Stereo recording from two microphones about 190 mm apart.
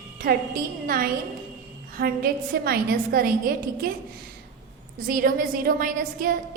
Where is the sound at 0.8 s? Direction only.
50° right (ahead or behind).